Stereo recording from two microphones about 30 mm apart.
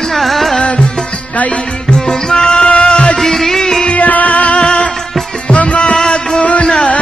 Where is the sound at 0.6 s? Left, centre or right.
Left.